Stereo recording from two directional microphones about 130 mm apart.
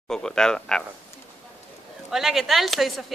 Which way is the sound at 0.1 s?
5° left (ahead or behind).